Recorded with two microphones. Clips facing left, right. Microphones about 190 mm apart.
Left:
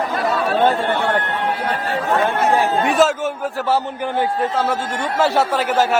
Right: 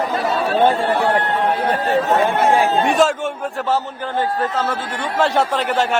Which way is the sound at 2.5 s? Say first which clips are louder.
Right 1 dB; 15° right (ahead or behind).